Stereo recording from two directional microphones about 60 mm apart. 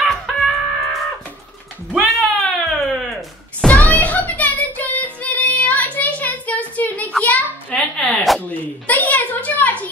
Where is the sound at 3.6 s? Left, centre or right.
Left.